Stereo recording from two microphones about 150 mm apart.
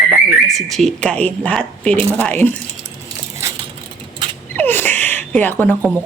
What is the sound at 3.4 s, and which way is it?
Crushing, 20° right (ahead or behind).